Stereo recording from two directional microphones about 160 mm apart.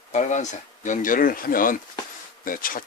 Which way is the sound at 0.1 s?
50° left (ahead or behind).